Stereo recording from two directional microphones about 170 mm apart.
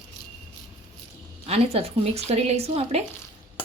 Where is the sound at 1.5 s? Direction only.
35° right (ahead or behind).